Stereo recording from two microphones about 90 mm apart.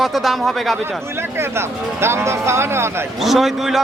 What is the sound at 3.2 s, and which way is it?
Speech, centre (ahead or behind).